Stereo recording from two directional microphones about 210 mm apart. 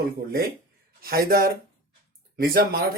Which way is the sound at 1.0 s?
45° right (ahead or behind).